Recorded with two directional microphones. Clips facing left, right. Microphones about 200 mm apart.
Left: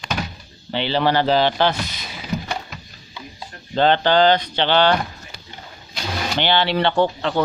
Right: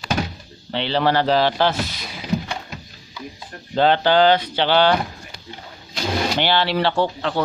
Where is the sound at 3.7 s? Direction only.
5° right (ahead or behind).